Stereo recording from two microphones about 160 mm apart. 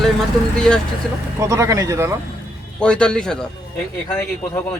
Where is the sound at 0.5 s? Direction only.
5° left (ahead or behind).